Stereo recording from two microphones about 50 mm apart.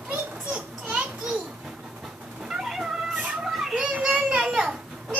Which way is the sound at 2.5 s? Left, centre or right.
Centre.